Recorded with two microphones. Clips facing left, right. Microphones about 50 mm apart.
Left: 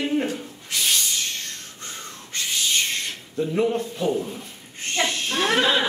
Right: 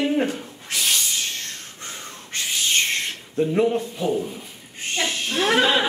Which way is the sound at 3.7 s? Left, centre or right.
Centre.